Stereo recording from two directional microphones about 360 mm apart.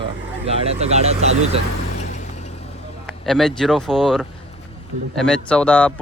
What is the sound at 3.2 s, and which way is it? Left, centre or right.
Speech, centre.